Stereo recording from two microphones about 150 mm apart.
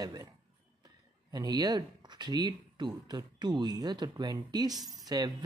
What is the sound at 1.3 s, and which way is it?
Speech, 25° right (ahead or behind).